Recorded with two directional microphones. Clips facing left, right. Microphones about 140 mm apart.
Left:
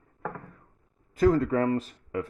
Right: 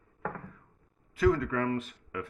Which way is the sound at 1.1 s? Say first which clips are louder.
Left 4 dB; 40° left (ahead or behind).